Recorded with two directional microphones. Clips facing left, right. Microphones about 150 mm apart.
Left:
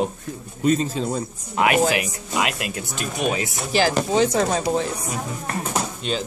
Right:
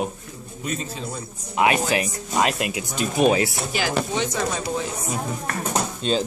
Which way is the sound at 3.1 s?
35° right (ahead or behind).